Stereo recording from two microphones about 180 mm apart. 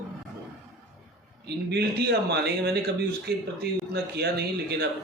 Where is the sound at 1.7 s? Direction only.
65° right (ahead or behind).